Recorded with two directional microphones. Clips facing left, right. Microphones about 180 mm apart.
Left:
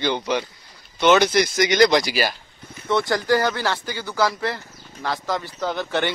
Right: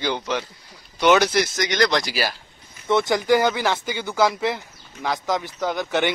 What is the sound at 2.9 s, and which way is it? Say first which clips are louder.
Speech: right 2 dB; 20° right (ahead or behind).